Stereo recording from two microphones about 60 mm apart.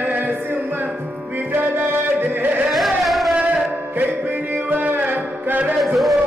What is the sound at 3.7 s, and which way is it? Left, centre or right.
Music, right.